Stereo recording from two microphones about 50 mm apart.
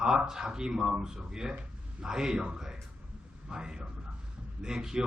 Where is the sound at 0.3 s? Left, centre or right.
Centre.